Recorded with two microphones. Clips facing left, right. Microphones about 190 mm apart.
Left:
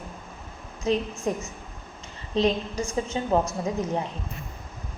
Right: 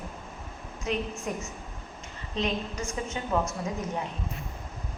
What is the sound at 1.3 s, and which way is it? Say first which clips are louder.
A woman's voice: left 5 dB; 35° left (ahead or behind).